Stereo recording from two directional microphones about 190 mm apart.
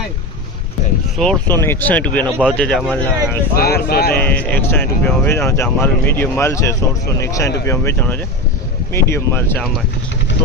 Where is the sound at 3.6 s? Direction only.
55° left (ahead or behind).